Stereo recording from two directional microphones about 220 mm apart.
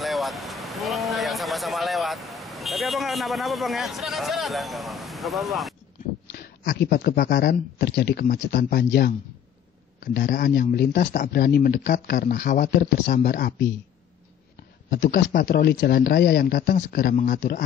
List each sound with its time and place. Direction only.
0.0 s vehicle: centre (ahead or behind)
6.3 s speech: 45° left (ahead or behind)
10.1 s speech: 40° left (ahead or behind)
14.9 s speech: 50° left (ahead or behind)